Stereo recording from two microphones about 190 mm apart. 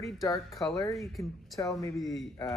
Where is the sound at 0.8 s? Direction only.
Centre (ahead or behind).